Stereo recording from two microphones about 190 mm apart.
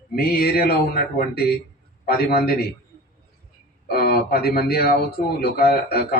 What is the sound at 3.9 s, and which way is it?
Speech, 55° left (ahead or behind).